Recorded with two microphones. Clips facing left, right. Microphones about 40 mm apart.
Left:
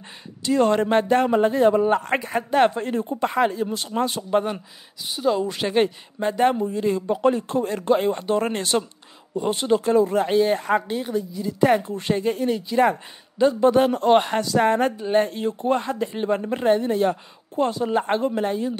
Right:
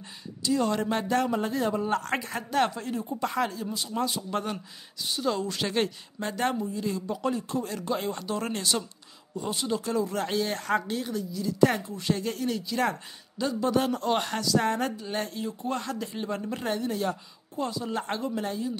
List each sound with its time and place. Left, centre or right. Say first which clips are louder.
0.4 s speech: left 7 dB; left
3.3 s a woman's voice: left 8 dB; left
3.7 s speech: left 5 dB; left
4.3 s a woman's voice: left 9 dB; left
6.6 s speech: left 8 dB; left
10.1 s a woman's voice: left 9 dB; left
11.8 s a woman's voice: left 6 dB; left
13.5 s speech: left 7 dB; left
15.8 s speech: left 7 dB; left
17.9 s a woman's voice: left 9 dB; left